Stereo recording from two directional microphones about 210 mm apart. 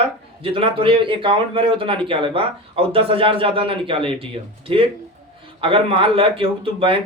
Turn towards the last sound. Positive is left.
turn(degrees=-25)  # may be behind; listen again after turning